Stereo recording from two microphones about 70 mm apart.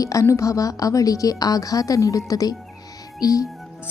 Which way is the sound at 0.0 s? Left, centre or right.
Left.